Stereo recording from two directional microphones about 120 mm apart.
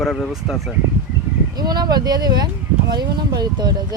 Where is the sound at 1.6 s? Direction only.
35° right (ahead or behind).